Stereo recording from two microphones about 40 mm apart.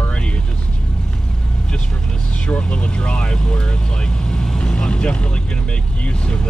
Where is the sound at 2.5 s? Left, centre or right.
Left.